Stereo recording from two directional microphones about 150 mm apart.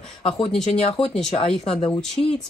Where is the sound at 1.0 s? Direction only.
5° left (ahead or behind).